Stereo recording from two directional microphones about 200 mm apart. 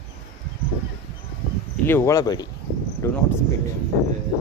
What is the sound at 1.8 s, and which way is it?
Speech, 10° left (ahead or behind).